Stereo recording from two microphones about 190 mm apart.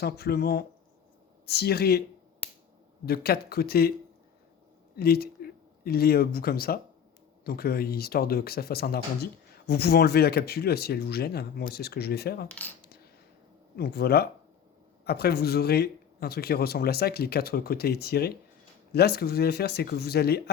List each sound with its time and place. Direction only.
0.0 s speech: 55° left (ahead or behind)
3.1 s speech: 55° left (ahead or behind)
4.9 s speech: 55° left (ahead or behind)
12.5 s coin: 10° left (ahead or behind)
13.7 s speech: 55° left (ahead or behind)